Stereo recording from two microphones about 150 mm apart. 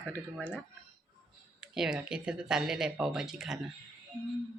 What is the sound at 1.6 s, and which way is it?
Speech, 5° right (ahead or behind).